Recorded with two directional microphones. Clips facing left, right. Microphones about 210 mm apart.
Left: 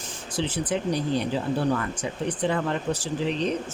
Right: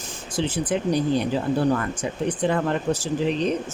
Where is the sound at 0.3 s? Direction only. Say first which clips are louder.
Right 3 dB; 45° right (ahead or behind).